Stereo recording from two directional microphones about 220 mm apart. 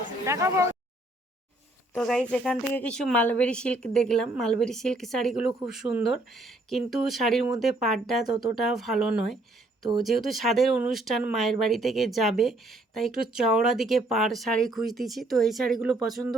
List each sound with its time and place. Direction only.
0.3 s speech: 15° right (ahead or behind)
1.9 s speech: centre (ahead or behind)